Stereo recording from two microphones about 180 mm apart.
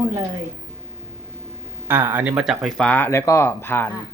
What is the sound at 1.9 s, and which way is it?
Speech, 10° right (ahead or behind).